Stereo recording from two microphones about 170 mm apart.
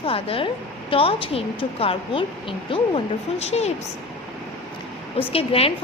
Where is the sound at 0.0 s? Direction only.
35° left (ahead or behind).